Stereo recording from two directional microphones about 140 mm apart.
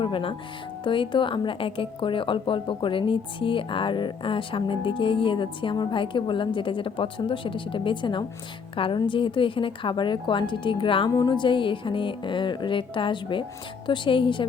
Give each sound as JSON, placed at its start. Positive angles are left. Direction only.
{"t": 0.0, "sound": "a woman's voice", "side_deg": 40}